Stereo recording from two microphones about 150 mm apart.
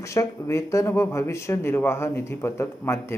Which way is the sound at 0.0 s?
20° left (ahead or behind).